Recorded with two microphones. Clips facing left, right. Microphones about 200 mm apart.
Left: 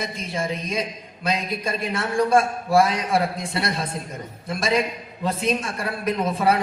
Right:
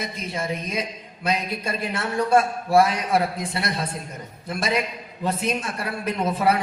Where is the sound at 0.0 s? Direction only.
30° left (ahead or behind).